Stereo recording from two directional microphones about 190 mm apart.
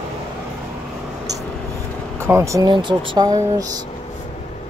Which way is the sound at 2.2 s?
15° right (ahead or behind).